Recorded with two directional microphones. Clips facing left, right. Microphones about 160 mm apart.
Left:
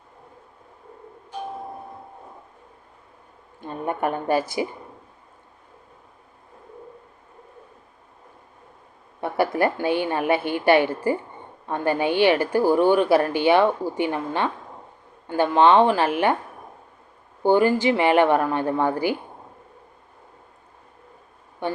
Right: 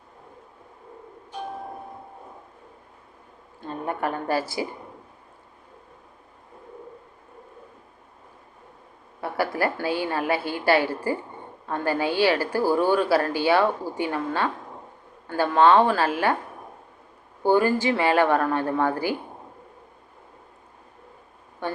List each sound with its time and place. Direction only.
3.8 s speech: 20° left (ahead or behind)
9.2 s speech: 20° left (ahead or behind)
17.4 s speech: 20° left (ahead or behind)
21.6 s speech: 15° left (ahead or behind)